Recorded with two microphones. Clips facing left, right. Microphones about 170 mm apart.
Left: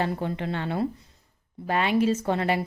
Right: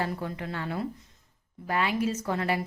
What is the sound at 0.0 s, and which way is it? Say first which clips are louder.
A woman's voice: left 4 dB; 25° left (ahead or behind).